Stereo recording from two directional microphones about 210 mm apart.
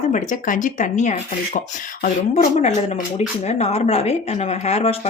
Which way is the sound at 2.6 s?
35° left (ahead or behind).